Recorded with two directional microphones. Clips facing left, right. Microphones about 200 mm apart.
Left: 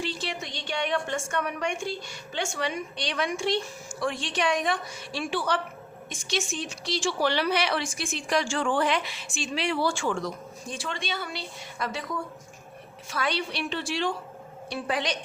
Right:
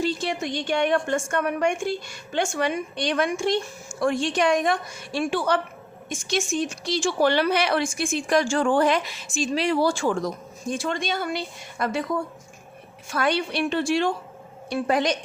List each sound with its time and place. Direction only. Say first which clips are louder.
0.0 s speech: right 7 dB; 45° right (ahead or behind)
13.1 s speech: right 6 dB; 50° right (ahead or behind)